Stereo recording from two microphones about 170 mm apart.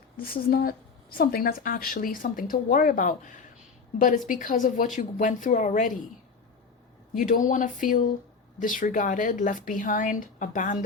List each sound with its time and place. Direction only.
0.3 s a woman's voice: 60° left (ahead or behind)
7.2 s a woman's voice: 50° left (ahead or behind)